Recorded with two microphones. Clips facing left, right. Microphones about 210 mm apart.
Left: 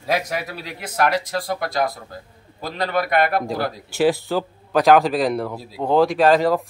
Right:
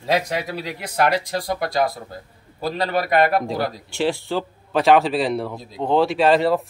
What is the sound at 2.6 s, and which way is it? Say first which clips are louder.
Speech: right 1 dB; 35° right (ahead or behind).